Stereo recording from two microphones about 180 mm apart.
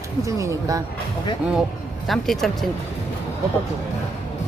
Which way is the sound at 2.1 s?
Centre (ahead or behind).